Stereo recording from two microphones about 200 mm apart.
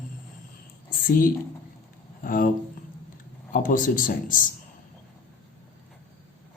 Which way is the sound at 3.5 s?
40° left (ahead or behind).